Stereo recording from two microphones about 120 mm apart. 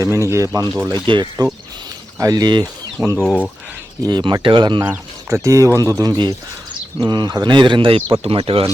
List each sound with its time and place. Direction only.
0.0 s speech: 25° right (ahead or behind)
1.0 s speech: 40° right (ahead or behind)
3.2 s speech: 10° left (ahead or behind)
4.0 s speech: 40° right (ahead or behind)
4.8 s speech: 25° right (ahead or behind); by 8.7 s 50° right (ahead or behind)